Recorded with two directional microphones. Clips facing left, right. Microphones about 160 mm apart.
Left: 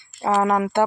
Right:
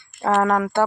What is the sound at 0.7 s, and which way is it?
Speech, 20° left (ahead or behind).